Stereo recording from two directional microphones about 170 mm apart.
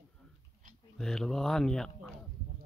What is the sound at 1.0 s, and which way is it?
Speech, 5° left (ahead or behind).